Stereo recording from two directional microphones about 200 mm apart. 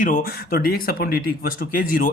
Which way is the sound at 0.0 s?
45° left (ahead or behind).